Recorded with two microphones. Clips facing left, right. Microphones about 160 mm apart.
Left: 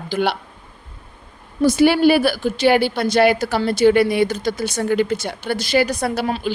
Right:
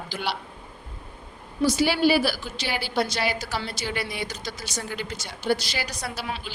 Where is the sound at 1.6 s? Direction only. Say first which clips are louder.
Left 8 dB; 55° left (ahead or behind).